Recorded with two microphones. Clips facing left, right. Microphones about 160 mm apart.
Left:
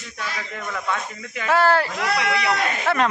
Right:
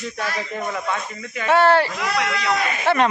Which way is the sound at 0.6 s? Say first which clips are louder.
Right 4 dB; 25° right (ahead or behind).